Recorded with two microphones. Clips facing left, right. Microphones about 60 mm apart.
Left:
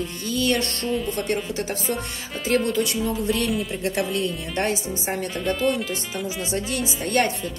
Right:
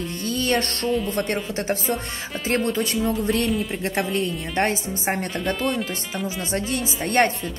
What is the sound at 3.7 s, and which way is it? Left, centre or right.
Speech, right.